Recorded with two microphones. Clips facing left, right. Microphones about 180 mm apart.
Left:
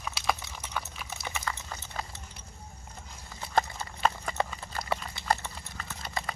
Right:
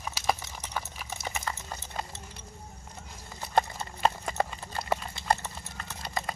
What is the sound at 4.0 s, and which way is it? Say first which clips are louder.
Clip-clop: right 1 dB; 25° right (ahead or behind).